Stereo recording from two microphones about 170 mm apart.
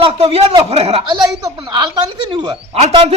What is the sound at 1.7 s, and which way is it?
A man's voice, 25° right (ahead or behind).